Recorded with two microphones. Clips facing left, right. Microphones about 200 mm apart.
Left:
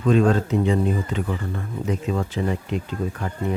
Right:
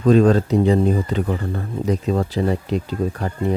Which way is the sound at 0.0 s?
35° right (ahead or behind).